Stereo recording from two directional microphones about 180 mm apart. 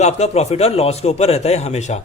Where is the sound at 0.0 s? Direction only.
35° left (ahead or behind).